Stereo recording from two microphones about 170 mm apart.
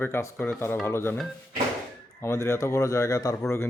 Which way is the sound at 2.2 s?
15° left (ahead or behind).